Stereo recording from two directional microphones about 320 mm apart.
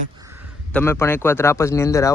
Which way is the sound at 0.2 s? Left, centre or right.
Centre.